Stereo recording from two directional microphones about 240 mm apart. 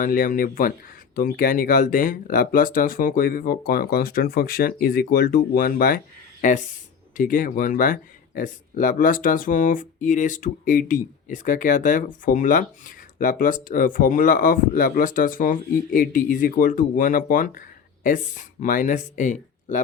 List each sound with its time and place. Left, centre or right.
0.0 s speech: left